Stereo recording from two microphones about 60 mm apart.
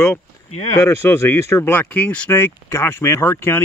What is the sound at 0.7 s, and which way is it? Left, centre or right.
Speech, left.